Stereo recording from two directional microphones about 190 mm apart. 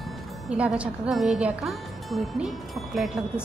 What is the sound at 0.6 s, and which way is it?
A woman's voice, 5° right (ahead or behind).